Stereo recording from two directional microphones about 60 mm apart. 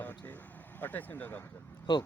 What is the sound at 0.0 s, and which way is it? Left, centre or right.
Vehicle, left.